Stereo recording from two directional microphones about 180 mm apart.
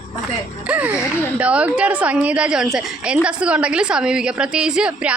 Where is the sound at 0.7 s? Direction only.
10° right (ahead or behind).